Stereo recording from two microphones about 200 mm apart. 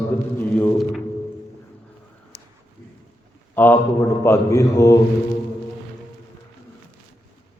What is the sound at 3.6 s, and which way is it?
A man's voice, 10° left (ahead or behind).